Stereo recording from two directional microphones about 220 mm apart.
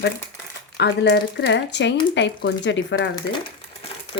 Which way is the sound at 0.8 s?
50° left (ahead or behind).